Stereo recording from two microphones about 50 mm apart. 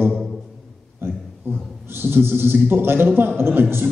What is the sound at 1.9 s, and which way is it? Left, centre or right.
A man's voice, right.